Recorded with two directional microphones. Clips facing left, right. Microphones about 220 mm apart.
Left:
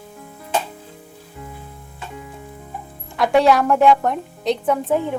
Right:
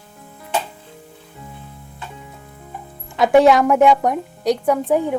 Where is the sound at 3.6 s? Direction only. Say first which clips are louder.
Right 1 dB; 20° right (ahead or behind).